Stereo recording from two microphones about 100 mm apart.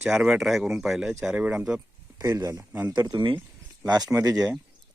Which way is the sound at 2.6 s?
20° right (ahead or behind).